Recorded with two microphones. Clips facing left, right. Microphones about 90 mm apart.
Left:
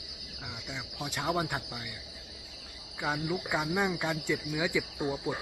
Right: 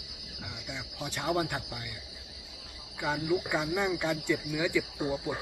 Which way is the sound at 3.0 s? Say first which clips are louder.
Right 3 dB; 15° left (ahead or behind).